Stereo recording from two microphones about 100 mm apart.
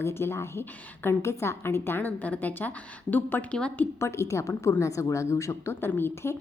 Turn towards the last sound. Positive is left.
turn(degrees=25)  # may be behind; listen again after turning